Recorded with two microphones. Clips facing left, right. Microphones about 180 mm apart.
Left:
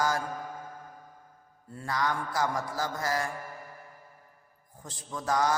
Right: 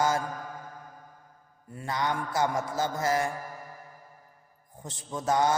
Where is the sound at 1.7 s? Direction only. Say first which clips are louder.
Right 1 dB; 20° right (ahead or behind).